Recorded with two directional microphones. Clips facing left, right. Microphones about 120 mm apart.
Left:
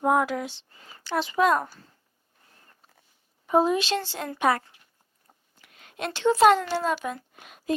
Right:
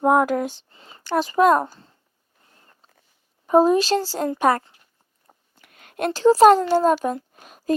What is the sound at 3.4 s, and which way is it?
Speech, 40° right (ahead or behind).